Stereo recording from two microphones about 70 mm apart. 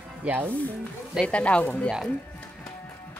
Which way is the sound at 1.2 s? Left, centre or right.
Centre.